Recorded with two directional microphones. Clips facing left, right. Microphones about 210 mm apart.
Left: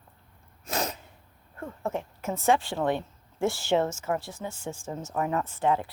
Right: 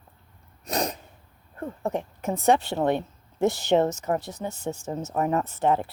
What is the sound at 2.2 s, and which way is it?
Speech, 35° right (ahead or behind).